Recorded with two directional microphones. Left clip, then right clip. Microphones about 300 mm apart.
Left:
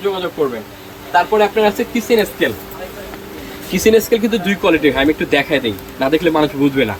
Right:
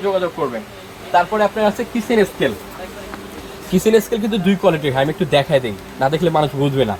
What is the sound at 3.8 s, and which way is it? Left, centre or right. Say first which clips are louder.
Speech: left 4 dB; right.